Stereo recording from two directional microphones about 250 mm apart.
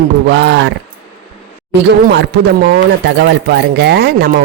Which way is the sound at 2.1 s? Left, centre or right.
Right.